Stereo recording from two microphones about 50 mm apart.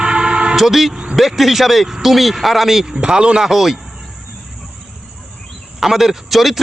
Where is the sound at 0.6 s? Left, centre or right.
Centre.